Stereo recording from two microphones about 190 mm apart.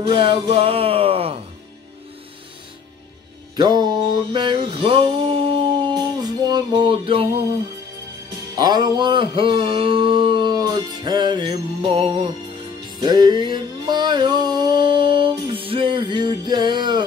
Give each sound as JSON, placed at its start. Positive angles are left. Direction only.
{"t": 0.0, "sound": "speech", "side_deg": -25}
{"t": 3.5, "sound": "mantra", "side_deg": -20}
{"t": 8.5, "sound": "mantra", "side_deg": -20}